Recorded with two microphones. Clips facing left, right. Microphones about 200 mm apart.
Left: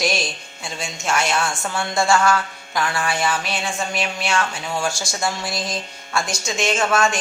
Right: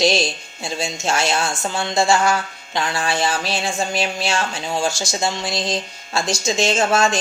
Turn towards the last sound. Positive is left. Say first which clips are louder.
# right 2 dB
turn(degrees=-25)  # may be behind; listen again after turning